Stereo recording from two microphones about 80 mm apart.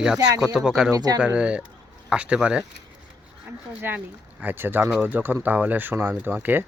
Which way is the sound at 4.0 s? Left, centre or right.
Right.